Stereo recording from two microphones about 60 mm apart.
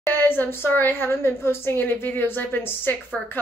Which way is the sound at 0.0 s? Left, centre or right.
Left.